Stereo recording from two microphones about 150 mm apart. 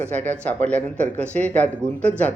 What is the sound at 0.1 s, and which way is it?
Speech, 10° left (ahead or behind).